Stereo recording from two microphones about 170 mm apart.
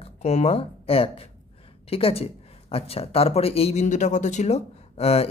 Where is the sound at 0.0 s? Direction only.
40° left (ahead or behind).